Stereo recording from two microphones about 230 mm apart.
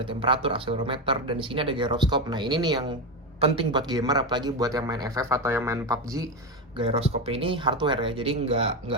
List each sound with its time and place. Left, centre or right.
0.0 s a man's voice: right
6.7 s speech: right